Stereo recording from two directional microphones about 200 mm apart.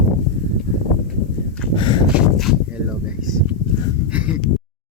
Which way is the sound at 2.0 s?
5° right (ahead or behind).